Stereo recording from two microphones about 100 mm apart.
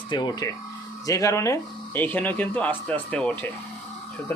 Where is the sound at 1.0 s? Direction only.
35° left (ahead or behind).